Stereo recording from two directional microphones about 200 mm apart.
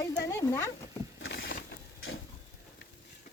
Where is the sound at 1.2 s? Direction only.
60° left (ahead or behind).